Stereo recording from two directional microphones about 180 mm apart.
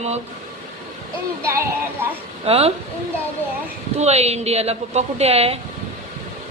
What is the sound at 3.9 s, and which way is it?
A woman's voice, 35° right (ahead or behind).